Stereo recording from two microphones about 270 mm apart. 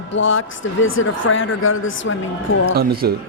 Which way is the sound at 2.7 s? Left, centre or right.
Right.